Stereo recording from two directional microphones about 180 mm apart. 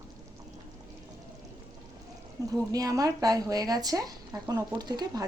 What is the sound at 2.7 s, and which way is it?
Speech, 20° right (ahead or behind).